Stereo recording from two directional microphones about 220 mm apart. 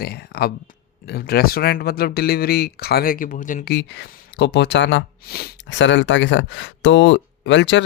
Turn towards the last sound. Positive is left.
turn(degrees=55)  # may be behind; listen again after turning